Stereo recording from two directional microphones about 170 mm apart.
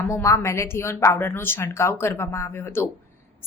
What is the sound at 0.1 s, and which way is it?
A woman's voice, 15° left (ahead or behind).